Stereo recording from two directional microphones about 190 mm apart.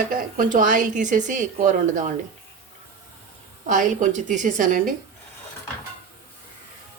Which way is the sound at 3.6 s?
40° right (ahead or behind).